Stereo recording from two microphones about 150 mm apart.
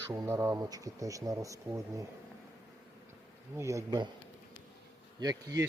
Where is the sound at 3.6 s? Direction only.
20° right (ahead or behind).